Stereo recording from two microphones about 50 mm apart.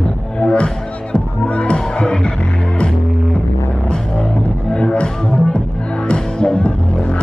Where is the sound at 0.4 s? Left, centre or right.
Left.